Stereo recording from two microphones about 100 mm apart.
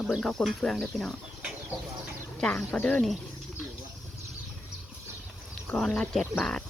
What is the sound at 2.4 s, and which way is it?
Speech, 10° left (ahead or behind).